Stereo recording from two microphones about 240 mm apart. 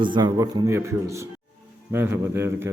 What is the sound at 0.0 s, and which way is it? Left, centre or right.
A man's voice, centre.